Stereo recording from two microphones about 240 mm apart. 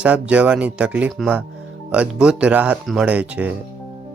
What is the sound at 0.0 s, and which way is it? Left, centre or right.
Speech, centre.